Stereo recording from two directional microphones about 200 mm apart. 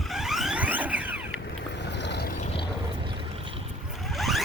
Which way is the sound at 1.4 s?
60° left (ahead or behind).